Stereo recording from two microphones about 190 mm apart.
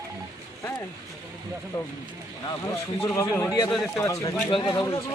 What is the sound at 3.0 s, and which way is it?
A man's voice, 10° left (ahead or behind).